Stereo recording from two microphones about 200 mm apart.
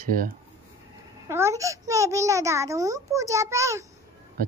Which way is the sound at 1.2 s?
15° right (ahead or behind).